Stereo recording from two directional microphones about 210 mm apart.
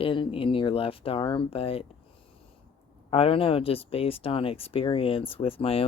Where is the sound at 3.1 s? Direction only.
25° left (ahead or behind).